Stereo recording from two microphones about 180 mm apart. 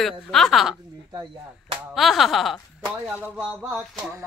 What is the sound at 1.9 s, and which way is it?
Speech, centre (ahead or behind).